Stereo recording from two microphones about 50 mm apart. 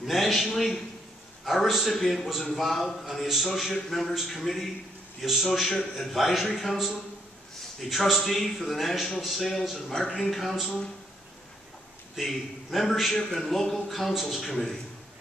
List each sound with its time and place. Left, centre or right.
0.0 s a man's voice: centre
12.2 s a man's voice: centre
13.1 s a man's voice: centre